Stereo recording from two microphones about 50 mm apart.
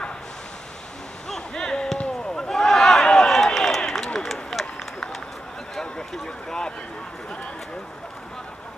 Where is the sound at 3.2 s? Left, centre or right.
Centre.